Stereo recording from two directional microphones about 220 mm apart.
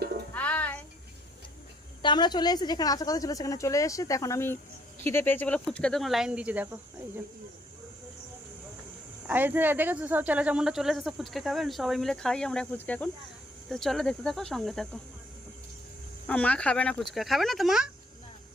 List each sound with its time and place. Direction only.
0.3 s music: 5° left (ahead or behind)
2.0 s speech: 20° left (ahead or behind); by 6.7 s 5° right (ahead or behind)
9.2 s speech: 10° right (ahead or behind)
16.2 s speech: 5° left (ahead or behind)